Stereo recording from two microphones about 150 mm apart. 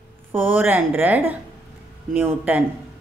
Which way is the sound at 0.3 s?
15° right (ahead or behind).